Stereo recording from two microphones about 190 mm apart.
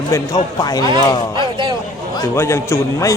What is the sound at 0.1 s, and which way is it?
A man's voice, 20° left (ahead or behind).